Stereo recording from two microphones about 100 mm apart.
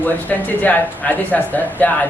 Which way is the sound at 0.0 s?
15° left (ahead or behind).